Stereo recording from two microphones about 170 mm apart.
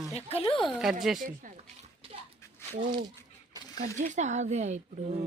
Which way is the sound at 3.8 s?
45° right (ahead or behind).